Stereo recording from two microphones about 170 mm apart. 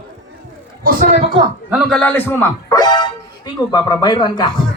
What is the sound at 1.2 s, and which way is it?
Speech, 30° right (ahead or behind).